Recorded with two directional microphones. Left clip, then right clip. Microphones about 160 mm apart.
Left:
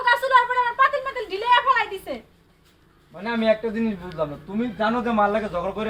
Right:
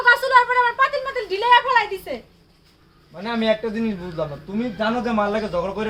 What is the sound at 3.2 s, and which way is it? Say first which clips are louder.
Speech: even; 15° right (ahead or behind).